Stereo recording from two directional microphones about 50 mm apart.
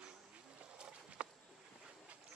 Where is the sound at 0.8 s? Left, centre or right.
Right.